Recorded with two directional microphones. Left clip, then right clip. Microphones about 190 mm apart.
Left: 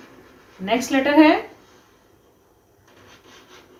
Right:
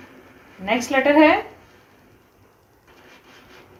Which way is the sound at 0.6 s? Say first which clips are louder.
Right 2 dB; 35° right (ahead or behind).